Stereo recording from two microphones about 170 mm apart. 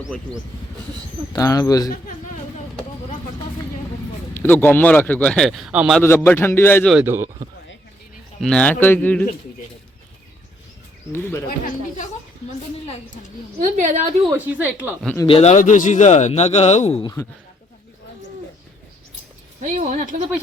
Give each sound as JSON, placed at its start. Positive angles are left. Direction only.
{"t": 1.3, "sound": "speech", "side_deg": 20}
{"t": 4.4, "sound": "speech", "side_deg": 10}
{"t": 6.0, "sound": "speech", "side_deg": 15}
{"t": 7.0, "sound": "speech", "side_deg": -15}
{"t": 8.4, "sound": "speech", "side_deg": 5}
{"t": 11.1, "sound": "speech", "side_deg": 15}
{"t": 11.4, "sound": "speech", "side_deg": 55}
{"t": 13.6, "sound": "speech", "side_deg": -45}
{"t": 14.3, "sound": "speech", "side_deg": -10}
{"t": 15.3, "sound": "a man's voice", "side_deg": 40}
{"t": 19.6, "sound": "speech", "side_deg": -45}